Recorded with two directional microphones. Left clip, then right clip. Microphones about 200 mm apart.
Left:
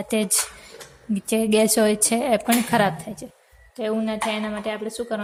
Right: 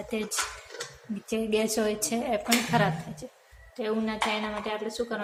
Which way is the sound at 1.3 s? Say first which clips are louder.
Left 8 dB; 40° left (ahead or behind).